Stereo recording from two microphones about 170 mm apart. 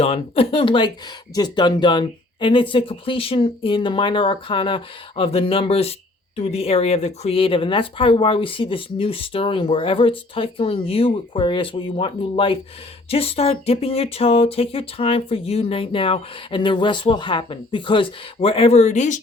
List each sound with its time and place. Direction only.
0.0 s speech: 35° left (ahead or behind)